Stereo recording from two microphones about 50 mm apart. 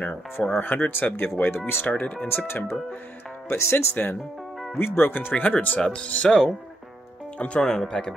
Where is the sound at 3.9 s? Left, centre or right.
Left.